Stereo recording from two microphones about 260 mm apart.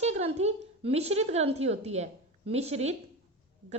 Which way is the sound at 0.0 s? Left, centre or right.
Right.